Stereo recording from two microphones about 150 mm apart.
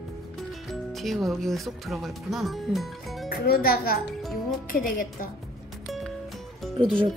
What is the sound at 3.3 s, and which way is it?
Speech, 90° left.